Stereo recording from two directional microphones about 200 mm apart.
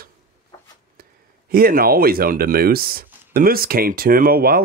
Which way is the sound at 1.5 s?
45° right (ahead or behind).